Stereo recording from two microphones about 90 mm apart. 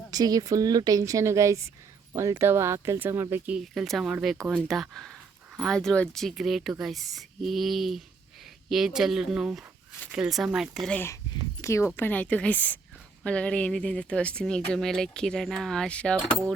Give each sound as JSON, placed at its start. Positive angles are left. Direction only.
{"t": 0.1, "sound": "a woman's voice", "side_deg": -45}
{"t": 3.6, "sound": "speech", "side_deg": 0}
{"t": 11.6, "sound": "speech", "side_deg": 30}
{"t": 11.9, "sound": "speech", "side_deg": 20}